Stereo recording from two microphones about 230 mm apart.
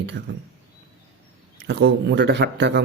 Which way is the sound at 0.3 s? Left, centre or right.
Right.